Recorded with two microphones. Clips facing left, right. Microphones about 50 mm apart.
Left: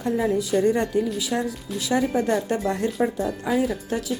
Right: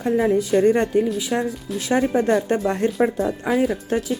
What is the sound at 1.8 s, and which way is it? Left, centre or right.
Speech, right.